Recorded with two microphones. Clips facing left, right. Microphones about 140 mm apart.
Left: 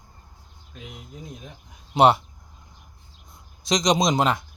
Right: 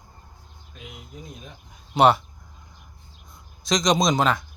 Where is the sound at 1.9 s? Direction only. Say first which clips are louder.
Even; 25° left (ahead or behind).